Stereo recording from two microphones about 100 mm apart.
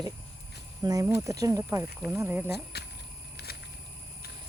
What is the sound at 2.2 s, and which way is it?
Speech, 20° right (ahead or behind).